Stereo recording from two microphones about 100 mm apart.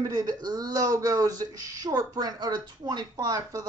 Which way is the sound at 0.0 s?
40° right (ahead or behind).